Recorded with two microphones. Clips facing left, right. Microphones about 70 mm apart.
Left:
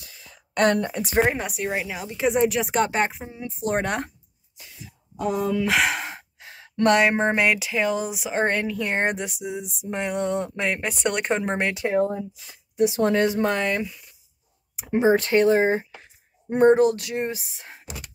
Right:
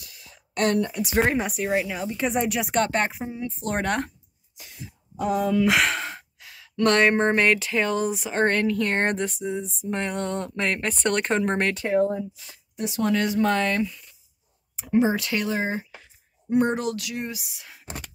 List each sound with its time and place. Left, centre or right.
0.6 s a woman's voice: left
1.2 s a woman's voice: centre
5.2 s a woman's voice: centre
5.9 s sigh: centre
6.1 s sigh: left
7.0 s speech: centre
14.9 s speech: left